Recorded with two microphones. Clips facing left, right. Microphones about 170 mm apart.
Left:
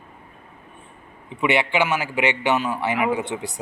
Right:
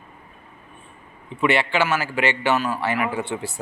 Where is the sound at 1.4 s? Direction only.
15° left (ahead or behind).